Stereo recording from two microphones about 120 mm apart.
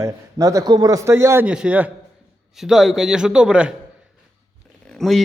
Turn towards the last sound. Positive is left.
turn(degrees=0)  # may be behind; listen again after turning